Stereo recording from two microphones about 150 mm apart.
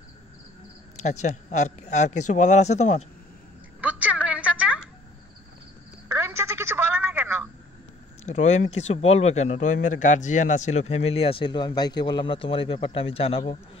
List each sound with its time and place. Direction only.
1.0 s a man's voice: 50° left (ahead or behind)
3.8 s a sound: 10° right (ahead or behind)
6.1 s telephone: 20° right (ahead or behind)
8.3 s a man's voice: 50° left (ahead or behind)